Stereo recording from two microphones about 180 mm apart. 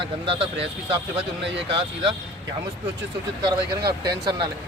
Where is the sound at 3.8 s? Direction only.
65° right (ahead or behind).